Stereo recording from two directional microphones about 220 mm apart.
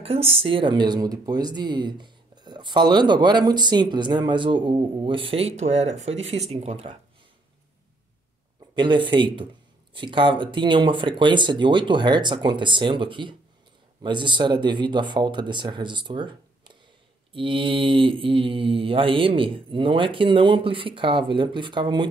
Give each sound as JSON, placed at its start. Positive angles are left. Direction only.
{"t": 0.0, "sound": "speech", "side_deg": -25}
{"t": 8.7, "sound": "speech", "side_deg": -20}